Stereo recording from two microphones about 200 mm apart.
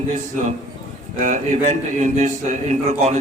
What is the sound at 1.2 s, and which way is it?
A man's voice, 35° right (ahead or behind).